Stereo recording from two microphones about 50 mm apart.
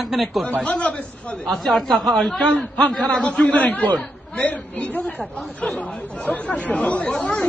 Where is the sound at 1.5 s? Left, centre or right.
Centre.